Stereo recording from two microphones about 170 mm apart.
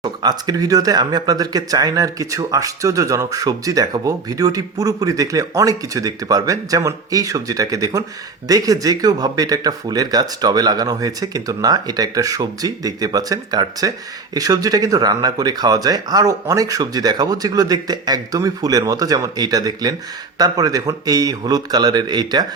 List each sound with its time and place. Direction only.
0.0 s speech: 25° right (ahead or behind)